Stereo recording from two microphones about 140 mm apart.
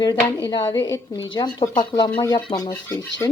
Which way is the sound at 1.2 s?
30° left (ahead or behind).